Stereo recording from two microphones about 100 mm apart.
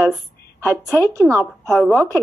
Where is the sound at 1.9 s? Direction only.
15° left (ahead or behind).